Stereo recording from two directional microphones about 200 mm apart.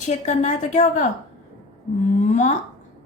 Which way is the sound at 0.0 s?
35° left (ahead or behind).